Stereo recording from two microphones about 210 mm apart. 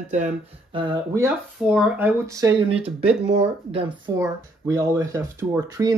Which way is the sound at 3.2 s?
25° right (ahead or behind).